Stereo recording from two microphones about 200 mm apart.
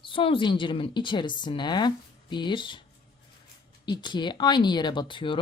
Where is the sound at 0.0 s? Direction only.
25° left (ahead or behind).